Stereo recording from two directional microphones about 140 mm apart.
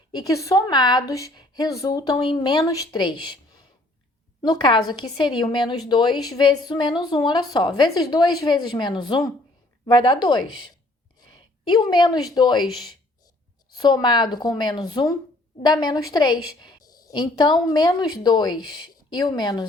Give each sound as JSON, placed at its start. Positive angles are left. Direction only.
{"t": 0.1, "sound": "a woman's voice", "side_deg": 25}
{"t": 4.4, "sound": "a woman's voice", "side_deg": 35}
{"t": 13.7, "sound": "a woman's voice", "side_deg": 35}